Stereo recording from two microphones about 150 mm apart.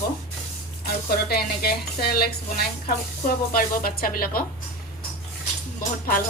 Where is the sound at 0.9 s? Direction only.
90° left.